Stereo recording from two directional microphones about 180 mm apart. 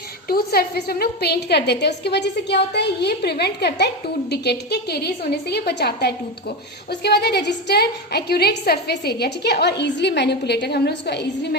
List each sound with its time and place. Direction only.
0.3 s a woman's voice: 55° left (ahead or behind)